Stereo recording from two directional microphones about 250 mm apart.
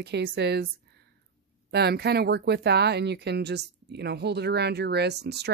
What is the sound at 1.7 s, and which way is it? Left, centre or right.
Speech, right.